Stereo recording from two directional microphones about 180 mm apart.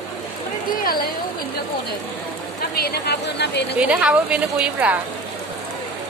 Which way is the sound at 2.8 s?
65° left (ahead or behind).